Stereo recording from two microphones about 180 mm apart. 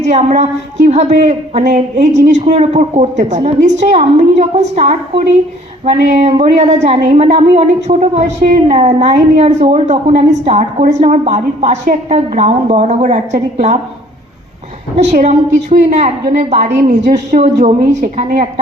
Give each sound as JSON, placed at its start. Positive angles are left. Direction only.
{"t": 0.1, "sound": "speech", "side_deg": -40}
{"t": 14.9, "sound": "a woman's voice", "side_deg": -40}